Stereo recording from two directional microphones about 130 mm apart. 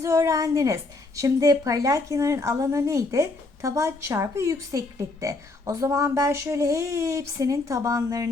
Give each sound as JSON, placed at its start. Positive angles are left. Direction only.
{"t": 0.0, "sound": "a woman's voice", "side_deg": -25}